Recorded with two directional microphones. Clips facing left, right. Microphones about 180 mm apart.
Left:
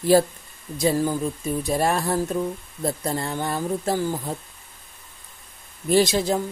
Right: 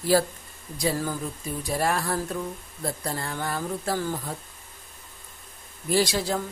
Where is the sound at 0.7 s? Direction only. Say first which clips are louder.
Left 6 dB; 25° left (ahead or behind).